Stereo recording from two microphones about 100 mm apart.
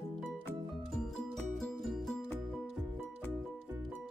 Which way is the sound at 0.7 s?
Centre (ahead or behind).